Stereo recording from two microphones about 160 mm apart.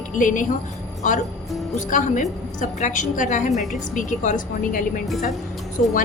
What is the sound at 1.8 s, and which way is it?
A woman's voice, 55° left (ahead or behind).